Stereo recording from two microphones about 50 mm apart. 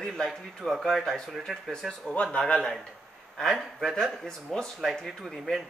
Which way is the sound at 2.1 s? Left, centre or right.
Left.